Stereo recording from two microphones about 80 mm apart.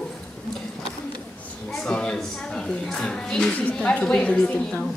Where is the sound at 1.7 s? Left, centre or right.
Centre.